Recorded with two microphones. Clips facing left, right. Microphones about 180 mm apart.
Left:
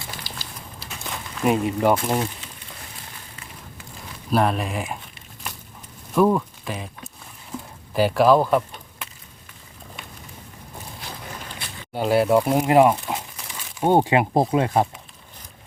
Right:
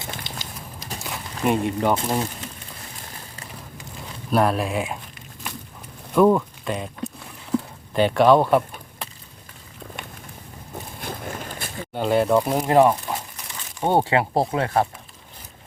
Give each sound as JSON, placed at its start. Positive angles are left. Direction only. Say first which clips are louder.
{"t": 0.1, "sound": "a sound", "louder": "right 3 dB", "side_deg": -20}
{"t": 1.0, "sound": "speech", "louder": "left 1 dB", "side_deg": 0}
{"t": 4.3, "sound": "speech", "louder": "right 1 dB", "side_deg": 0}
{"t": 6.1, "sound": "speech", "louder": "right 2 dB", "side_deg": 0}
{"t": 7.9, "sound": "speech", "louder": "right 1 dB", "side_deg": 5}
{"t": 9.0, "sound": "a sound", "louder": "right 4 dB", "side_deg": -35}
{"t": 11.0, "sound": "boat", "louder": "right 6 dB", "side_deg": -50}
{"t": 11.9, "sound": "speech", "louder": "left 1 dB", "side_deg": 5}